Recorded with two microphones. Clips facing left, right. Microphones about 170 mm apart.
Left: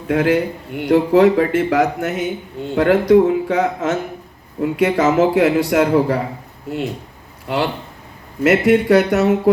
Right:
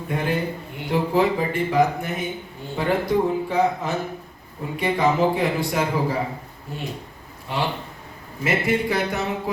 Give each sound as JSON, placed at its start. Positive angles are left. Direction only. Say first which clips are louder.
{"t": 0.1, "sound": "speech", "louder": "left 9 dB", "side_deg": 90}